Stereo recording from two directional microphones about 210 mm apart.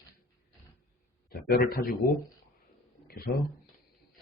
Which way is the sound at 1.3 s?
45° left (ahead or behind).